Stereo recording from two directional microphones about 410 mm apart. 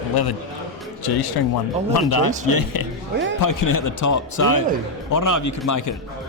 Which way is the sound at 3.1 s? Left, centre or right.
Right.